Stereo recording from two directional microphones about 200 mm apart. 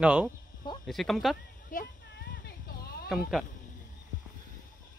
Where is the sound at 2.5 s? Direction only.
50° left (ahead or behind).